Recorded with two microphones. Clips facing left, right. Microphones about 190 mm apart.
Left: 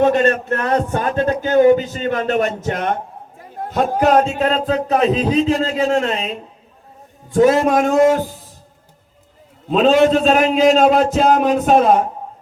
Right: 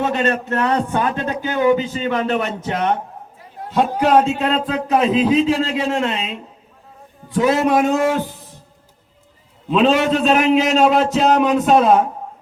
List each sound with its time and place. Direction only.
0.0 s a man's voice: 45° left (ahead or behind)
9.6 s a man's voice: 40° left (ahead or behind)